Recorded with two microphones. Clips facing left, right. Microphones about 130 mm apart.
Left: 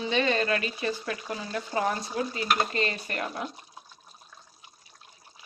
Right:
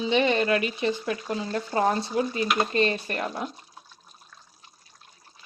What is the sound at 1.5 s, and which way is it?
Stir, 35° right (ahead or behind).